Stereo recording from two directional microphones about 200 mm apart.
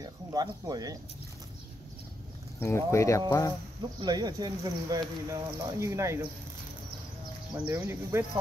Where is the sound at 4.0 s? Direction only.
20° right (ahead or behind).